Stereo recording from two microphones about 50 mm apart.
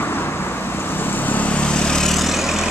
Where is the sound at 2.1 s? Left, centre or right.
Centre.